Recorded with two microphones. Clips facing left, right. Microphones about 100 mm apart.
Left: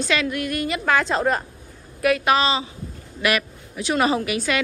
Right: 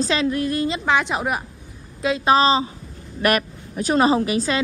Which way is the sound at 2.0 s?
25° right (ahead or behind).